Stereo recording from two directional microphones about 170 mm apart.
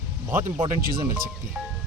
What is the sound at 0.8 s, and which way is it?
Speech, 55° right (ahead or behind).